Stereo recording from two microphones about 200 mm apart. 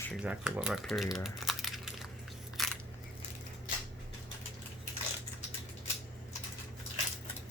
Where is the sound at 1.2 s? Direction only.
Centre (ahead or behind).